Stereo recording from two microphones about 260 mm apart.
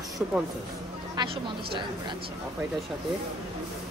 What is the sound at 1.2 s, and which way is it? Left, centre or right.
Speech, centre.